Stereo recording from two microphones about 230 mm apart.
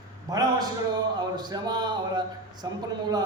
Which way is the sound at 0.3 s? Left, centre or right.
Centre.